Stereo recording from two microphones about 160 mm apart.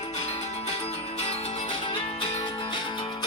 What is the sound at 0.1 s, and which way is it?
Music, 40° left (ahead or behind).